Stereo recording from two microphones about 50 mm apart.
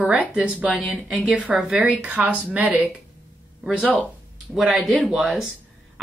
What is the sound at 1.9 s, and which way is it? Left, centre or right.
Speech, right.